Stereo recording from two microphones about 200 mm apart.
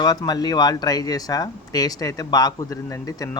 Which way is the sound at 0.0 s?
20° left (ahead or behind).